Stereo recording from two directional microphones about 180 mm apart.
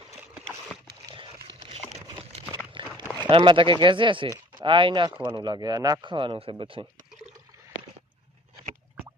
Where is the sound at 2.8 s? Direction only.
30° right (ahead or behind).